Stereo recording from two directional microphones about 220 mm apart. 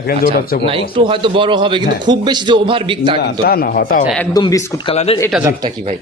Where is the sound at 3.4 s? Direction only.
45° left (ahead or behind).